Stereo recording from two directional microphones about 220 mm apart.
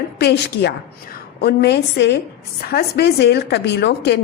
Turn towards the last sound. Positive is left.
turn(degrees=50)  # may be behind; listen again after turning